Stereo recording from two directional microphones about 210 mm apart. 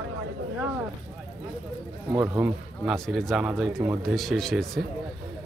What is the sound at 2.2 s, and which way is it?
Speech, 10° right (ahead or behind).